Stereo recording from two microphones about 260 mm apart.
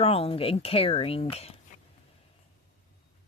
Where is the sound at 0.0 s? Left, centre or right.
Left.